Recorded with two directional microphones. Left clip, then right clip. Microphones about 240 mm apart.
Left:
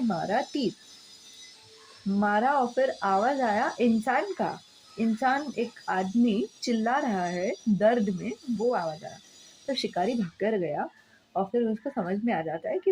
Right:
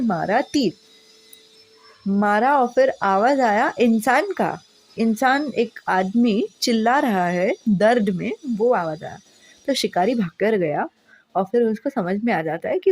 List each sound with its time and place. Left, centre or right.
0.1 s a woman's voice: right
2.1 s a woman's voice: right